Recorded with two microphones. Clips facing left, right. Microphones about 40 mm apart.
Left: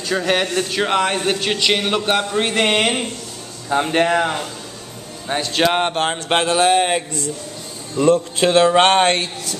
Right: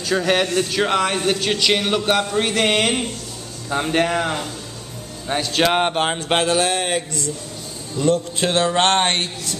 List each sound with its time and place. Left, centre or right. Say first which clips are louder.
0.0 s speech: even; centre
8.4 s a sound: left 5 dB; left
9.0 s a man's voice: left 3 dB; left